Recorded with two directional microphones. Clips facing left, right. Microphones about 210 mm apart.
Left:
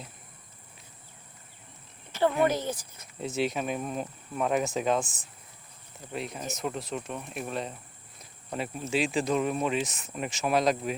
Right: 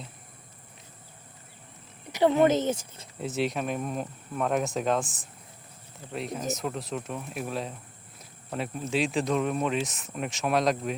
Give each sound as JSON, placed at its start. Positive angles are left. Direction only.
{"t": 2.1, "sound": "speech", "side_deg": -20}
{"t": 3.2, "sound": "speech", "side_deg": 0}